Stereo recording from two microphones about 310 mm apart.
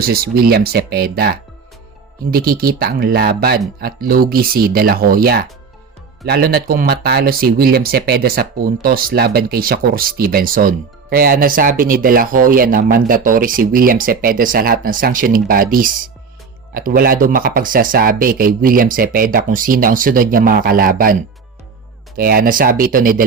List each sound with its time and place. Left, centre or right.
0.0 s speech: right